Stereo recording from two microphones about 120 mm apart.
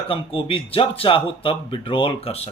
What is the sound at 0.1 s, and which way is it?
A man's voice, 50° left (ahead or behind).